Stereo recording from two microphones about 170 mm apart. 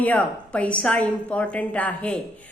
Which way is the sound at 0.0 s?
10° left (ahead or behind).